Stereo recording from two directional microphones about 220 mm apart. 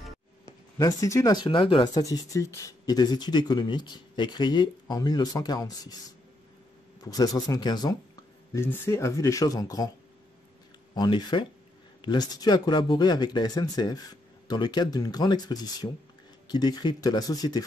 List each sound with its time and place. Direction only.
0.7 s speech: 15° left (ahead or behind)
7.0 s speech: 15° left (ahead or behind)
11.0 s speech: 20° left (ahead or behind)